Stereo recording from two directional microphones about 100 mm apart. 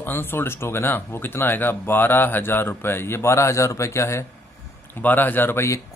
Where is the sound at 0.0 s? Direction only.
20° left (ahead or behind).